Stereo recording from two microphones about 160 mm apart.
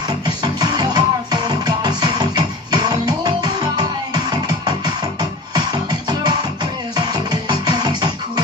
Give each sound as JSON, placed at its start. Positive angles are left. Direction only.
{"t": 0.4, "sound": "music", "side_deg": -25}